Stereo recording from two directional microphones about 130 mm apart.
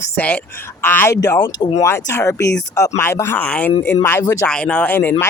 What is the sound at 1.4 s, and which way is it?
Speech, 35° left (ahead or behind).